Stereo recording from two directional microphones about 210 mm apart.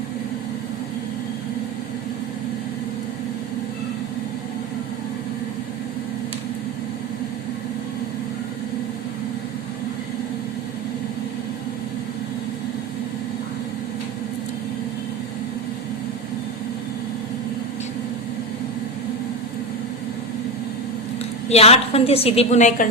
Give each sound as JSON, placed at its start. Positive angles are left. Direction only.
{"t": 21.5, "sound": "a woman's voice", "side_deg": 30}